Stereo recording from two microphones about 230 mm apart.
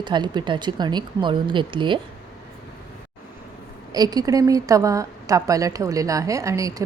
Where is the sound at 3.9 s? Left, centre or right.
Centre.